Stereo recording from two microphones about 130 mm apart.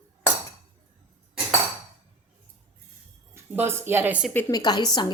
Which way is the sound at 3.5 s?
20° right (ahead or behind).